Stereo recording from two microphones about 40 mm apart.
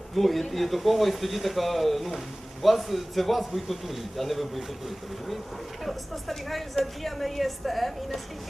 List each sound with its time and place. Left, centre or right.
0.2 s speech: centre
5.8 s speech: centre